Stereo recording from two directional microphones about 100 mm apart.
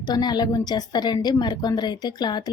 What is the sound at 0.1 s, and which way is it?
A woman's voice, 45° left (ahead or behind).